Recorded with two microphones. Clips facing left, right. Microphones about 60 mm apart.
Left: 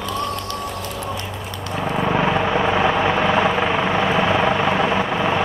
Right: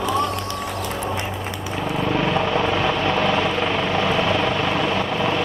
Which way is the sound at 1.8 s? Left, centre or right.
Centre.